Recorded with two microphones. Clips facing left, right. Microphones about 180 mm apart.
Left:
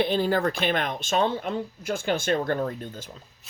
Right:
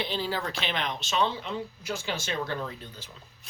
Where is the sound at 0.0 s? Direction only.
50° left (ahead or behind).